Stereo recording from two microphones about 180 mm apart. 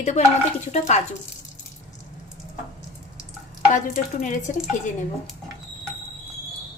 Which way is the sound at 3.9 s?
45° left (ahead or behind).